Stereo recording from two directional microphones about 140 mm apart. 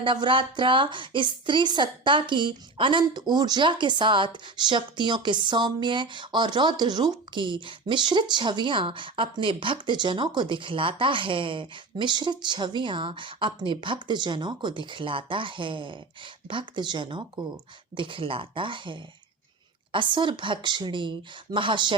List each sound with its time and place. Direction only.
0.0 s a woman's voice: 35° right (ahead or behind)